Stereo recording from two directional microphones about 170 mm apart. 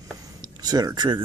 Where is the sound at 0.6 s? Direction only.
25° right (ahead or behind).